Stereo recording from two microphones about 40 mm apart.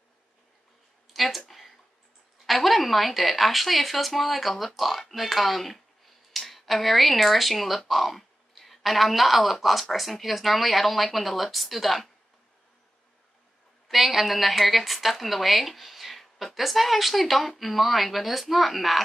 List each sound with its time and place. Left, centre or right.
1.1 s speech: centre
2.4 s a woman's voice: centre
13.8 s a woman's voice: centre